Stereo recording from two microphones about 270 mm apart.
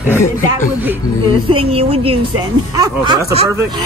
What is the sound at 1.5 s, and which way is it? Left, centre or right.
A woman's voice, right.